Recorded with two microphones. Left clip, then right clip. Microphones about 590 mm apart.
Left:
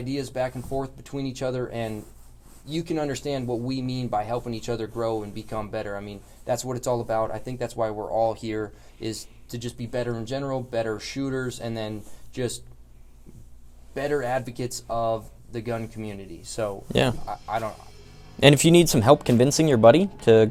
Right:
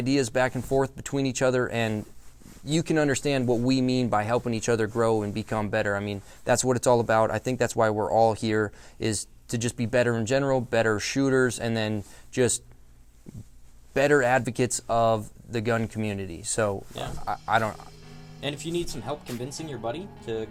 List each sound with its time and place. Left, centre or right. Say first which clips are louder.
0.0 s speech: right 4 dB; right
13.9 s speech: right 5 dB; right
18.3 s speech: left 15 dB; left